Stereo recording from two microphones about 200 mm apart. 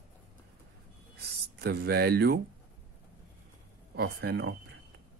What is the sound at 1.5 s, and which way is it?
Speech, 50° right (ahead or behind).